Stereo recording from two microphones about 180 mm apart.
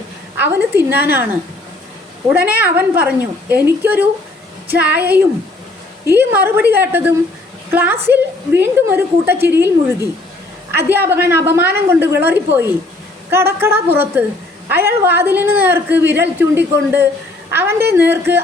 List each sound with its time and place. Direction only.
0.3 s a woman's voice: 10° right (ahead or behind)
2.3 s a woman's voice: 10° right (ahead or behind)
10.8 s a woman's voice: 10° right (ahead or behind)